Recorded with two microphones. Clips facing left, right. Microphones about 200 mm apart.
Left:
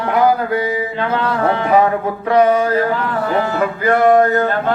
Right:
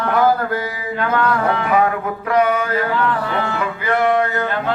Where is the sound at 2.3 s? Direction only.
30° left (ahead or behind).